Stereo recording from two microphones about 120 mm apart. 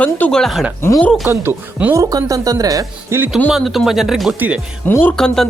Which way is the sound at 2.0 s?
30° right (ahead or behind).